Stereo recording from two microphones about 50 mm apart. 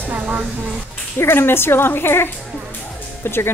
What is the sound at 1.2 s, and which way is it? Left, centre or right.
Speech, left.